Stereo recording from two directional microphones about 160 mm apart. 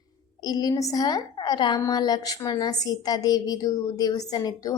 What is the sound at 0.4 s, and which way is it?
A woman's voice, 25° left (ahead or behind).